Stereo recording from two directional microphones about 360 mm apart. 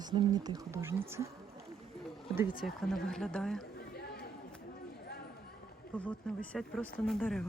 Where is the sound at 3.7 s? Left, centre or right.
Left.